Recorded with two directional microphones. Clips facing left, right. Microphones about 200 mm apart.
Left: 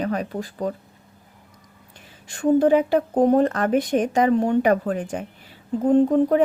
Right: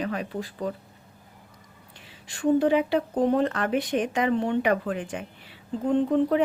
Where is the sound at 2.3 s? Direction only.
45° left (ahead or behind).